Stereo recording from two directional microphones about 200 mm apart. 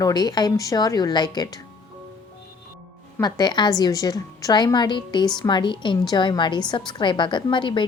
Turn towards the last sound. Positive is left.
turn(degrees=25)  # may be behind; listen again after turning